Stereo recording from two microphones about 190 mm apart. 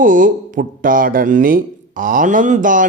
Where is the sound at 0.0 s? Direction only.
45° right (ahead or behind).